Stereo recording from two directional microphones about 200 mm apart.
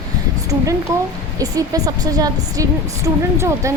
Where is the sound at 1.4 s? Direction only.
20° right (ahead or behind).